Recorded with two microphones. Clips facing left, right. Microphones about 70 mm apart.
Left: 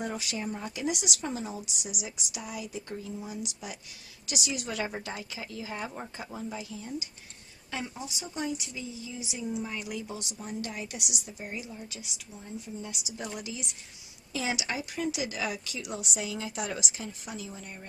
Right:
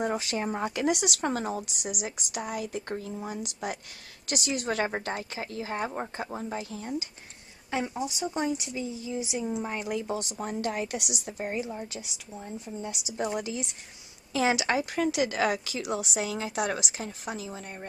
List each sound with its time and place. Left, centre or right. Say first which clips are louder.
0.0 s speech: right 5 dB; right
0.5 s a woman's voice: right 6 dB; right
7.7 s a woman's voice: right 7 dB; right